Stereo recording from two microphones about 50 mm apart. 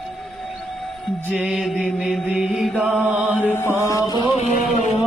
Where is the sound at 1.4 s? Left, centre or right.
Centre.